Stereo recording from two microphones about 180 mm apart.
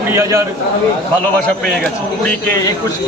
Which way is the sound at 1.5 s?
5° left (ahead or behind).